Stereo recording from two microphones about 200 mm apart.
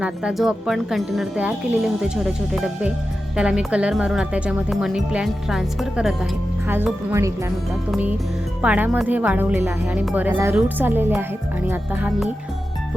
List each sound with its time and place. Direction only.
0.0 s speech: 5° right (ahead or behind)